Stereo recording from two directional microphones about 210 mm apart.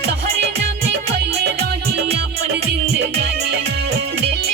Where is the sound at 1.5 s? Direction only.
50° right (ahead or behind).